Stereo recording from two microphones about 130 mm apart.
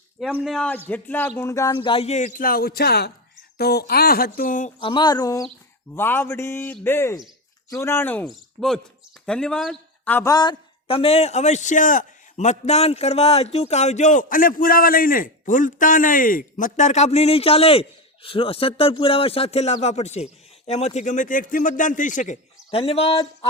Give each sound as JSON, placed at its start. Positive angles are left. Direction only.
{"t": 0.4, "sound": "a man's voice", "side_deg": 5}
{"t": 1.4, "sound": "speech", "side_deg": 25}
{"t": 1.7, "sound": "a man's voice", "side_deg": 40}
{"t": 4.4, "sound": "a man's voice", "side_deg": 85}
{"t": 4.8, "sound": "a sound", "side_deg": 40}
{"t": 5.9, "sound": "a man's voice", "side_deg": 15}
{"t": 8.3, "sound": "speech", "side_deg": 5}
{"t": 10.2, "sound": "a man's voice", "side_deg": 30}
{"t": 22.7, "sound": "speech", "side_deg": 50}